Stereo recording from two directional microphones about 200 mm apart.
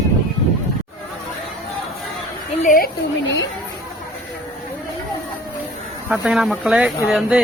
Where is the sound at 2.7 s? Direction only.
45° left (ahead or behind).